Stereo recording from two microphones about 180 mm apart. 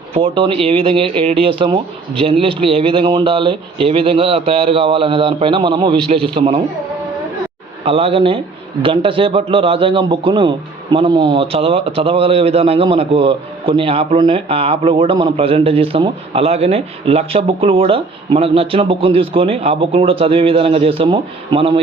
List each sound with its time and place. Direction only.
0.1 s speech: 30° right (ahead or behind)
7.9 s speech: 30° right (ahead or behind)